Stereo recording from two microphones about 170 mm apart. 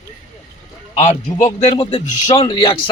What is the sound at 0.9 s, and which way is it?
A man's voice, 45° left (ahead or behind).